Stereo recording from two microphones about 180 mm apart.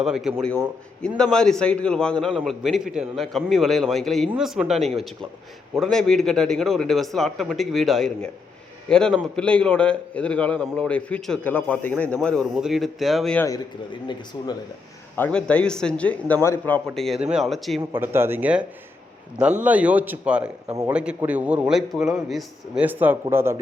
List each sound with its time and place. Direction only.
0.0 s a man's voice: centre (ahead or behind)
14.3 s speech: 25° left (ahead or behind)
15.1 s speech: 10° left (ahead or behind)
16.9 s a man's voice: centre (ahead or behind)
18.0 s a man's voice: 15° right (ahead or behind)